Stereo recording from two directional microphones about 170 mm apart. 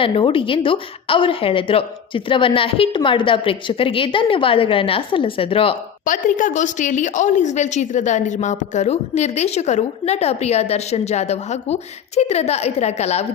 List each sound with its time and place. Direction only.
0.0 s a woman's voice: 30° left (ahead or behind)
6.1 s a woman's voice: 50° left (ahead or behind)